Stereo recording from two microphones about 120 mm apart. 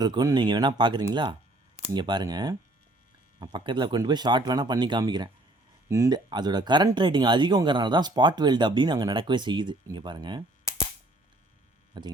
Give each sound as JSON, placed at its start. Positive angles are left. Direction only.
{"t": 0.0, "sound": "speech", "side_deg": -35}
{"t": 11.9, "sound": "speech", "side_deg": -40}